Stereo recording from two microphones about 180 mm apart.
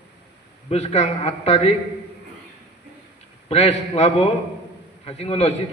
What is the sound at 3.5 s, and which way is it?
A man's voice, 35° left (ahead or behind).